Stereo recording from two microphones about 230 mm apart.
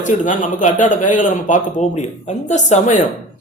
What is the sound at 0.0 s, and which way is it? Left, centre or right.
Speech, left.